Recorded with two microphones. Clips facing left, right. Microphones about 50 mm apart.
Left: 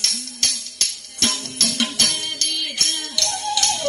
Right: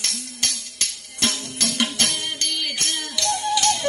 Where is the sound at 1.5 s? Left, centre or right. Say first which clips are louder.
Even; centre.